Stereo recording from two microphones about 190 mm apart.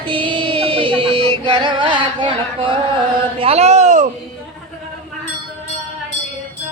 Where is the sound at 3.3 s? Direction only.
30° right (ahead or behind).